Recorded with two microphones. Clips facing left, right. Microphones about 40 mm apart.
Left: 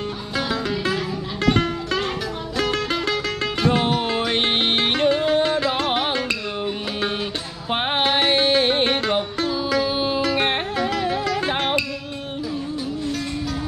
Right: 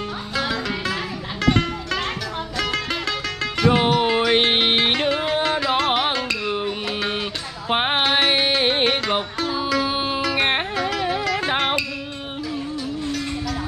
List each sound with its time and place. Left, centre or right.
3.6 s music: centre
7.7 s music: centre